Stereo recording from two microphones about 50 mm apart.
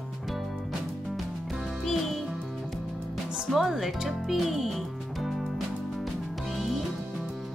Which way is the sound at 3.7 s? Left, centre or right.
Centre.